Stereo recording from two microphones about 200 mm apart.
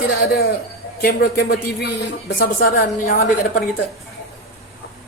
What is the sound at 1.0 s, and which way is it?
A man's voice, 50° left (ahead or behind).